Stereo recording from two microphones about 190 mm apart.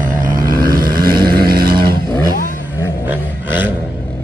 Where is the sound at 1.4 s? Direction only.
55° right (ahead or behind).